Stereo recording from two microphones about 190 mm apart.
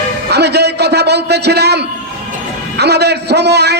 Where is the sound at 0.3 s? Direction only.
60° right (ahead or behind).